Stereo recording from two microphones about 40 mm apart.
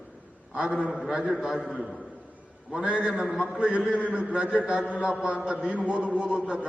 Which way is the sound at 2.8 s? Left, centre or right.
Right.